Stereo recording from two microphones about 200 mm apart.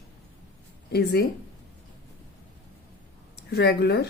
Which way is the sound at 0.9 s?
55° left (ahead or behind).